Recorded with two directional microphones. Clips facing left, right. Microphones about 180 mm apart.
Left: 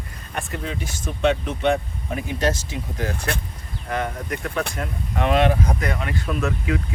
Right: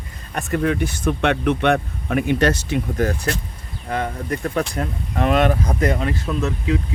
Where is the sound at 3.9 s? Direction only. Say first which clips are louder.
Right 2 dB; 35° right (ahead or behind).